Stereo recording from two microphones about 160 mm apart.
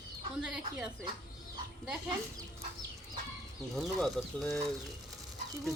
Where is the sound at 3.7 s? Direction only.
Centre (ahead or behind).